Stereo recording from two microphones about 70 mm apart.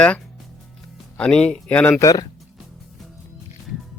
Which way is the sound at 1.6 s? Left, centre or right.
Left.